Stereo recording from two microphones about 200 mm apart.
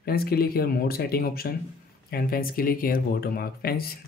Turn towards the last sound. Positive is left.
turn(degrees=50)  # may be behind; listen again after turning